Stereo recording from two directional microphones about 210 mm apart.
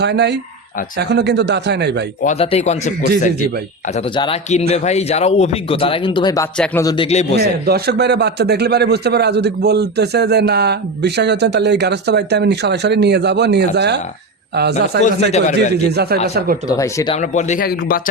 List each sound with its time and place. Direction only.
0.0 s a man's voice: 55° right (ahead or behind)
2.2 s speech: 30° left (ahead or behind)
7.3 s a man's voice: 50° right (ahead or behind)
15.3 s speech: 35° left (ahead or behind)
15.9 s a man's voice: 50° right (ahead or behind)
16.6 s speech: 15° left (ahead or behind)
17.2 s speech: 35° left (ahead or behind)